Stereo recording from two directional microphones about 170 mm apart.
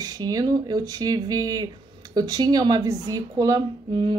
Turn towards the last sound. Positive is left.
turn(degrees=-25)  # may be behind; listen again after turning